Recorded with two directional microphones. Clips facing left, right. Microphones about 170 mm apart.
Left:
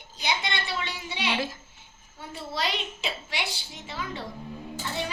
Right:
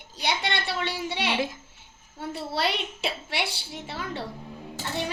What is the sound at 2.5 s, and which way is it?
A woman's voice, 60° right (ahead or behind).